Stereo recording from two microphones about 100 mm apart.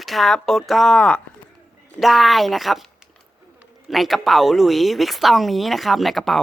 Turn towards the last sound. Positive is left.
turn(degrees=0)  # may be behind; listen again after turning